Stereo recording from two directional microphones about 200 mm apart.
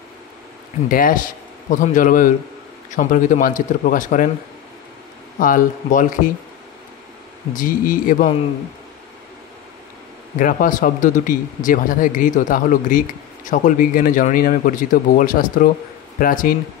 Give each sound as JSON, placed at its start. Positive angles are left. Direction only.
{"t": 0.8, "sound": "speech", "side_deg": 45}
{"t": 5.4, "sound": "speech", "side_deg": 40}
{"t": 7.5, "sound": "speech", "side_deg": 45}
{"t": 10.4, "sound": "speech", "side_deg": 40}